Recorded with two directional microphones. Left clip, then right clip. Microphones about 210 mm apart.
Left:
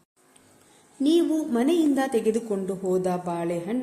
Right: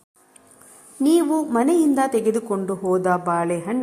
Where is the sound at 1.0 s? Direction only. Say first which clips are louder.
Right 4 dB; 15° right (ahead or behind).